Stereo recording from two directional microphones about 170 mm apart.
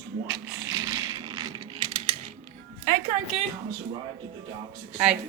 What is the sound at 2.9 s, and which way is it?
Music, 60° right (ahead or behind).